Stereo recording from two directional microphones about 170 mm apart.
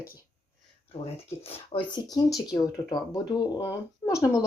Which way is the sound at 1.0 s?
35° left (ahead or behind).